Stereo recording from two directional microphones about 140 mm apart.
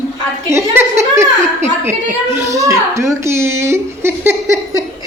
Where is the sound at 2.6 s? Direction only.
20° right (ahead or behind).